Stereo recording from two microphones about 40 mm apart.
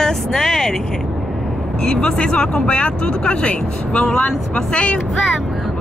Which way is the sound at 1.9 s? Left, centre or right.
Centre.